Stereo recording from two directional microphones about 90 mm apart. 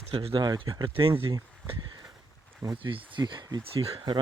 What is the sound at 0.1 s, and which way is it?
Speech, 90° right.